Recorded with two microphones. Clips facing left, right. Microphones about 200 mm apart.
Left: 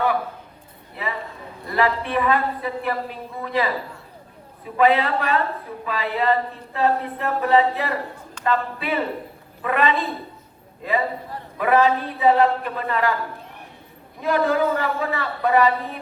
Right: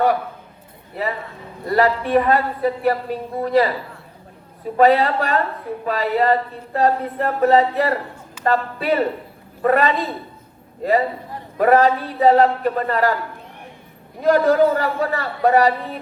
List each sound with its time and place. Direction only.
1.0 s speech: 40° right (ahead or behind)
11.5 s speech: 45° right (ahead or behind)
14.2 s speech: 40° right (ahead or behind)